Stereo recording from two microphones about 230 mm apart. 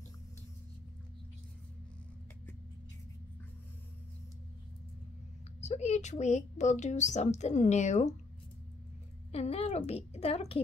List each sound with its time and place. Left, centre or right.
5.6 s speech: left
9.3 s a woman's voice: left